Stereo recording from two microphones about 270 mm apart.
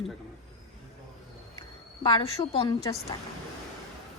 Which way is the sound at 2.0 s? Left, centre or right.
Centre.